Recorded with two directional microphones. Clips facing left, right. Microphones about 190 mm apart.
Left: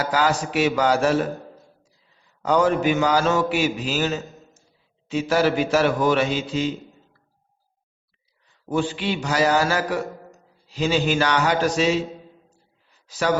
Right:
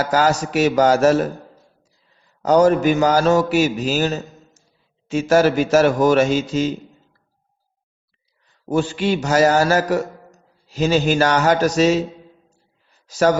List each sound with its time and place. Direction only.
0.0 s a man's voice: 45° right (ahead or behind)
2.4 s a man's voice: 40° right (ahead or behind)
8.6 s a man's voice: 45° right (ahead or behind)
13.1 s speech: 45° right (ahead or behind)